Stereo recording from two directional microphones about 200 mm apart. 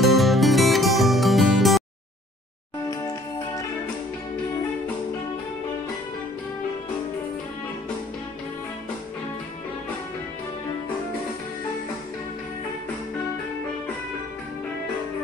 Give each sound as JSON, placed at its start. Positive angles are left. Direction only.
{"t": 0.0, "sound": "music", "side_deg": 0}
{"t": 2.9, "sound": "music", "side_deg": 15}